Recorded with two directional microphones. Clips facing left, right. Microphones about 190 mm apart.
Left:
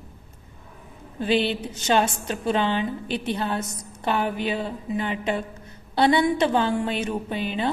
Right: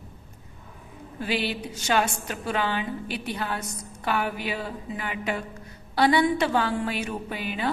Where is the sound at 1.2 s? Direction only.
25° left (ahead or behind).